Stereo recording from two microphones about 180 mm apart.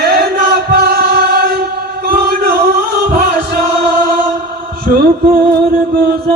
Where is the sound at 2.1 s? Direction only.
60° right (ahead or behind).